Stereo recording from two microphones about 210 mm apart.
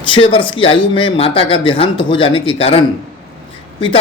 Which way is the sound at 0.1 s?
25° left (ahead or behind).